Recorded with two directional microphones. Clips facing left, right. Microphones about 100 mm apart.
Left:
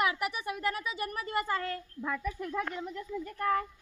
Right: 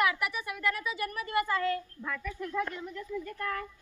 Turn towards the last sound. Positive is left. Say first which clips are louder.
# left 4 dB
turn(degrees=25)  # may be behind; listen again after turning